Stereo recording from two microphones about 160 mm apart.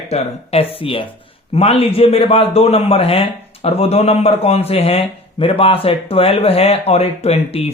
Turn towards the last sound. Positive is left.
turn(degrees=40)  # may be behind; listen again after turning